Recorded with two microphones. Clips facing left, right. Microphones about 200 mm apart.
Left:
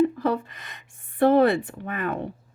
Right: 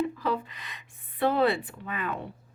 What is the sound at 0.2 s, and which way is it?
Speech, 50° left (ahead or behind).